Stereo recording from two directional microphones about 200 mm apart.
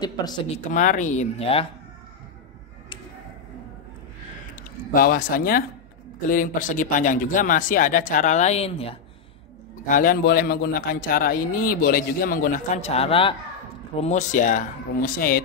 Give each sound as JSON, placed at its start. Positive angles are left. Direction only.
{"t": 0.0, "sound": "speech", "side_deg": 20}
{"t": 0.7, "sound": "speech", "side_deg": 40}
{"t": 4.6, "sound": "speech", "side_deg": 45}
{"t": 9.8, "sound": "a man's voice", "side_deg": 45}